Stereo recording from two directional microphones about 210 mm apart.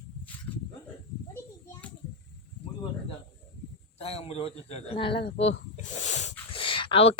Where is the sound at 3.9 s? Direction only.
30° left (ahead or behind).